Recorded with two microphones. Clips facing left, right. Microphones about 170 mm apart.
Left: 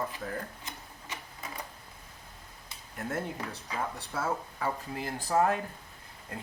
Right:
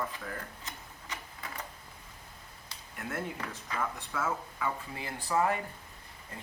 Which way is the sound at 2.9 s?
40° left (ahead or behind).